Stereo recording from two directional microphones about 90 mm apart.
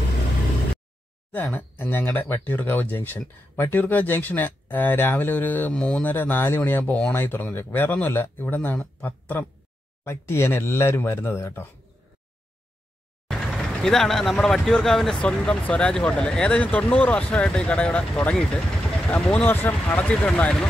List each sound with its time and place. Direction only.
1.3 s speech: 25° left (ahead or behind)
13.3 s speech: 5° left (ahead or behind)
19.5 s speech: 25° left (ahead or behind)
20.2 s speech: 10° left (ahead or behind)